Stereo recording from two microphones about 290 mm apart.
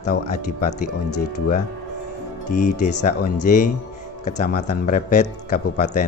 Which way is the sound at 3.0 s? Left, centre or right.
Left.